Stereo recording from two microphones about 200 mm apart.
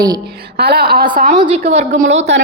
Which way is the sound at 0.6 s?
55° right (ahead or behind).